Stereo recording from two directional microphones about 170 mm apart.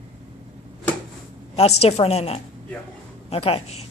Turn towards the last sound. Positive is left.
turn(degrees=35)  # may be behind; listen again after turning